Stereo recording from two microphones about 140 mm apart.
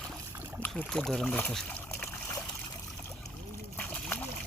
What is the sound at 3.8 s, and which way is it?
Splash, 15° left (ahead or behind).